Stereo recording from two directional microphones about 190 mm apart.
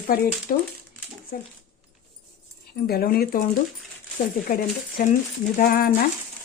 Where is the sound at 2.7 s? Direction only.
55° left (ahead or behind).